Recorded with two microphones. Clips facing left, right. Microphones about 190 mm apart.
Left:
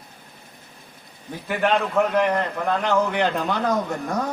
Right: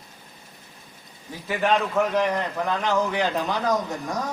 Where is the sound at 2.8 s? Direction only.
60° left (ahead or behind).